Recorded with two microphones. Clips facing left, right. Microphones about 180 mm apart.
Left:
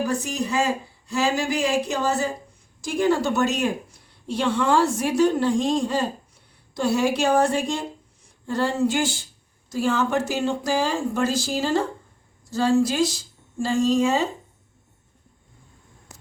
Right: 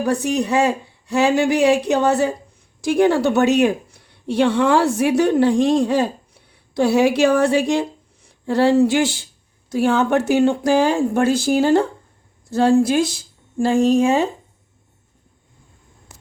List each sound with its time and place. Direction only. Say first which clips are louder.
0.0 s a woman's voice: right 6 dB; 60° right (ahead or behind)